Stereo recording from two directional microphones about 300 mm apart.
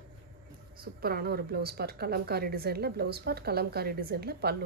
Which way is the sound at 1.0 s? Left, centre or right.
Right.